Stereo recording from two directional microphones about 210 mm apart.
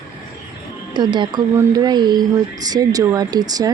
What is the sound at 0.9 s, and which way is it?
Speech, 20° right (ahead or behind).